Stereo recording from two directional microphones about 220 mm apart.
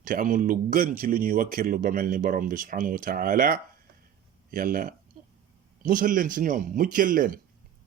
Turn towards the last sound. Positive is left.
turn(degrees=-40)  # may be behind; listen again after turning